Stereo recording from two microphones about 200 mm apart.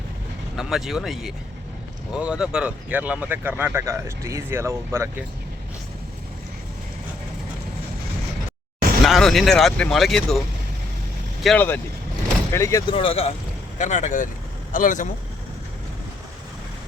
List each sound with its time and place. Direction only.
0.5 s speech: centre (ahead or behind)
9.0 s speech: centre (ahead or behind)
11.4 s speech: 10° left (ahead or behind)
12.9 s speech: 25° left (ahead or behind)